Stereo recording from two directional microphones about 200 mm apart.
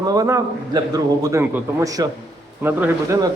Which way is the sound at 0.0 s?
20° right (ahead or behind).